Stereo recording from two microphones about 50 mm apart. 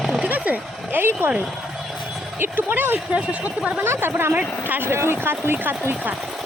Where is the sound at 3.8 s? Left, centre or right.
Right.